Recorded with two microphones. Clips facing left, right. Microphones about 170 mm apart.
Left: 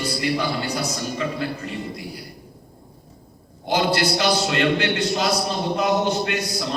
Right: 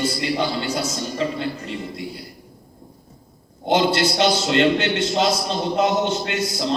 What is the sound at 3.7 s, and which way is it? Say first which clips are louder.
A man's voice: right 2 dB; 25° right (ahead or behind).